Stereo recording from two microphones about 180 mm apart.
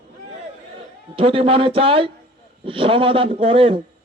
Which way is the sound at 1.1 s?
30° right (ahead or behind).